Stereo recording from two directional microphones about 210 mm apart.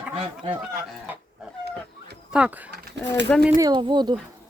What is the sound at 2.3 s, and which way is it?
Speech, 5° right (ahead or behind).